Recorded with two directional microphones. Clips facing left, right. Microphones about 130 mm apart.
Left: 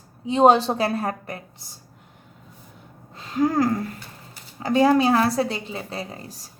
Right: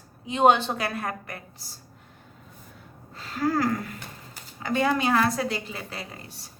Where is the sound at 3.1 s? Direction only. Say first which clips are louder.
Left 4 dB; 20° left (ahead or behind).